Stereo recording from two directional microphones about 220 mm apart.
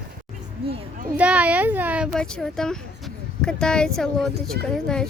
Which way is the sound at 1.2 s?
5° right (ahead or behind).